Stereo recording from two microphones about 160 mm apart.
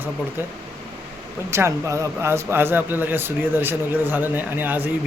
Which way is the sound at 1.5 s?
20° right (ahead or behind).